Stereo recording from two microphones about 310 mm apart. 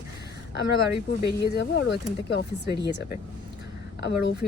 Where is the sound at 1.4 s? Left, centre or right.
Left.